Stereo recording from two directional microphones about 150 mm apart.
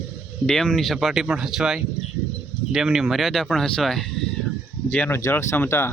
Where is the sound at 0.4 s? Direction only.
5° left (ahead or behind).